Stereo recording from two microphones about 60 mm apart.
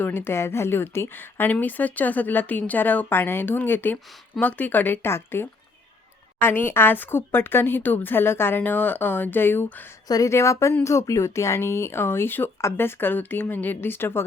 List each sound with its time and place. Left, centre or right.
0.0 s speech: left
10.2 s speech: left